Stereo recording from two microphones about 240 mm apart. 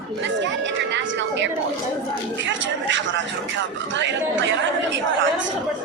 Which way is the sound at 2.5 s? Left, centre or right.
Right.